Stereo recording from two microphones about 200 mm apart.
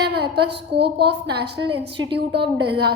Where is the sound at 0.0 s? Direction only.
55° right (ahead or behind).